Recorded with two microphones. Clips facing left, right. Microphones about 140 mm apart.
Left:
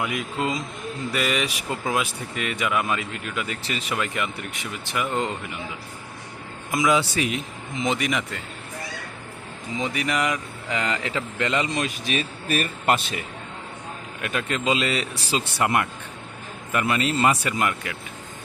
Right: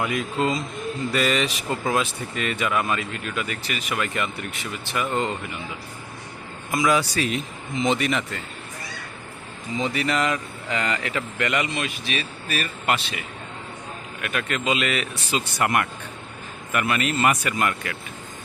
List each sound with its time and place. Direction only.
0.0 s speech: 10° left (ahead or behind)
6.7 s a man's voice: 20° left (ahead or behind)
7.3 s speech: 5° left (ahead or behind)
9.7 s speech: 15° left (ahead or behind)
11.7 s speech: 40° left (ahead or behind)
14.2 s a man's voice: 25° left (ahead or behind)